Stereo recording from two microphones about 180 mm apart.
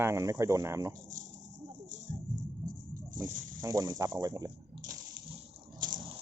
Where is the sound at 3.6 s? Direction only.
20° right (ahead or behind).